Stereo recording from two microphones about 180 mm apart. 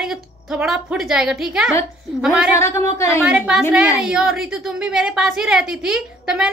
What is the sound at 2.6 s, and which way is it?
Speech, 15° left (ahead or behind).